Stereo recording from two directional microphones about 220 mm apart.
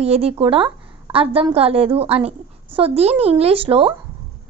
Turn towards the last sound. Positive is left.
turn(degrees=-25)  # may be behind; listen again after turning